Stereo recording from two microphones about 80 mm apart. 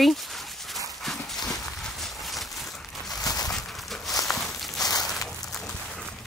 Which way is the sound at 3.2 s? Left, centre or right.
Left.